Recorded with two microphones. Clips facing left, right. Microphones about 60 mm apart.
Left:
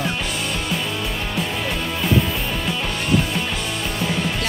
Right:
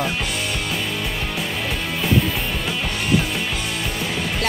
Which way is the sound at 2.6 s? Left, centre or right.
Centre.